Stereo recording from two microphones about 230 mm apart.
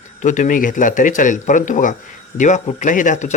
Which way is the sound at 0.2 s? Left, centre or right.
Left.